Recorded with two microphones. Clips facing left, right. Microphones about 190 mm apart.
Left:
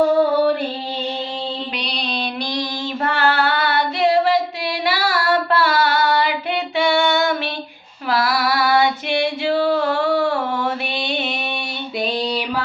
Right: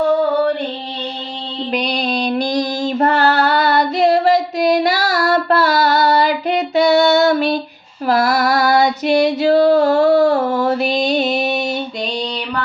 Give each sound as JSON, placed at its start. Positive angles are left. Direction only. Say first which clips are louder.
{"t": 1.7, "sound": "female singing", "louder": "right 7 dB", "side_deg": -45}